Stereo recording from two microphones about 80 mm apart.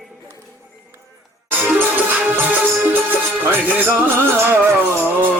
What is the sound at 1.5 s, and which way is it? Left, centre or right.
Music, right.